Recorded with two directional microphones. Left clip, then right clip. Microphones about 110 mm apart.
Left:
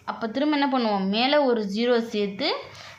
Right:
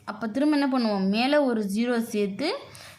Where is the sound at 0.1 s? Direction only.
40° right (ahead or behind).